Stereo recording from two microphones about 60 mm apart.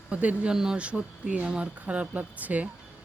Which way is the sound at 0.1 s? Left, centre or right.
Right.